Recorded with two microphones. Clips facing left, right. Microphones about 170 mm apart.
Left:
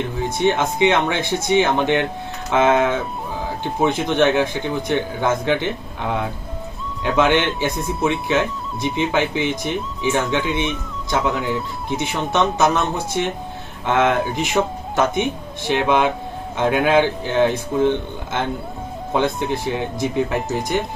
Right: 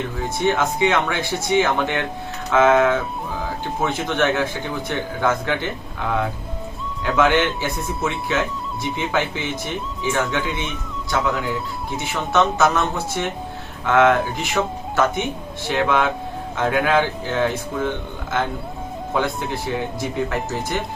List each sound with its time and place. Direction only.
0.3 s speech: 20° left (ahead or behind)
11.9 s speech: 20° left (ahead or behind)